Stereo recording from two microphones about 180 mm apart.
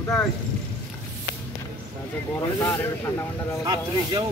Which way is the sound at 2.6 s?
10° left (ahead or behind).